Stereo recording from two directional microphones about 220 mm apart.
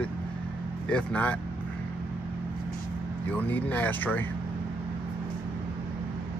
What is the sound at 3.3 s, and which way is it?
Speech, 10° left (ahead or behind).